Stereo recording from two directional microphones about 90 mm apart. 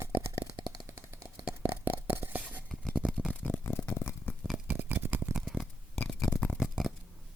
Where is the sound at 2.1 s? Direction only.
20° right (ahead or behind).